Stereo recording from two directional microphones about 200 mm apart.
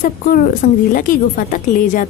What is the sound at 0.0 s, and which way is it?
A woman's voice, 40° left (ahead or behind).